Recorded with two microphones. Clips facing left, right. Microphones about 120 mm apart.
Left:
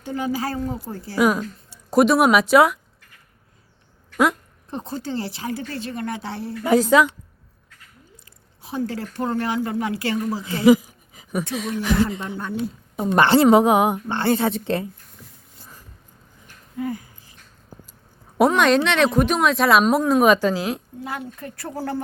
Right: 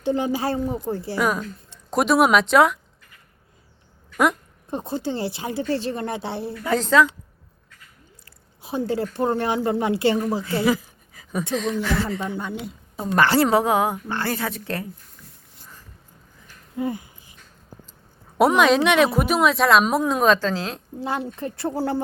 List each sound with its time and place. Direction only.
0.0 s speech: 25° right (ahead or behind)
1.2 s speech: 5° left (ahead or behind)
4.9 s speech: 20° right (ahead or behind)
6.6 s a woman's voice: 10° left (ahead or behind)
8.6 s speech: 20° right (ahead or behind)
10.4 s a sound: 15° left (ahead or behind)
11.5 s a woman's voice: 10° left (ahead or behind); by 14.8 s 25° left (ahead or behind)
16.7 s a sound: 20° right (ahead or behind)
18.3 s a woman's voice: 5° right (ahead or behind); by 20.8 s 10° left (ahead or behind)
21.0 s speech: 30° right (ahead or behind)